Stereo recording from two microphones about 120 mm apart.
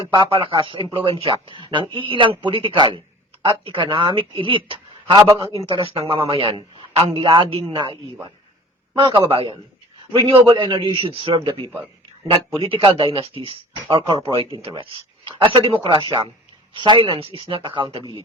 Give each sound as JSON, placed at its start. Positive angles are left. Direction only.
{"t": 0.0, "sound": "a man's voice", "side_deg": -45}
{"t": 9.1, "sound": "a man's voice", "side_deg": -55}
{"t": 12.6, "sound": "a man's voice", "side_deg": -50}